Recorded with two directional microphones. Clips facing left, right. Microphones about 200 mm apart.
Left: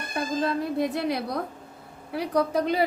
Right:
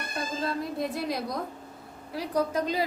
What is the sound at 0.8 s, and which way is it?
A woman's voice, 65° left (ahead or behind).